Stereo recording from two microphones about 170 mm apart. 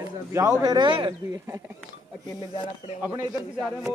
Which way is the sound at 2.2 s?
25° left (ahead or behind).